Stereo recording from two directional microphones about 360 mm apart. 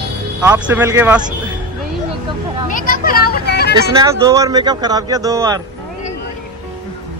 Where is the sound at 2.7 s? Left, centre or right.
Left.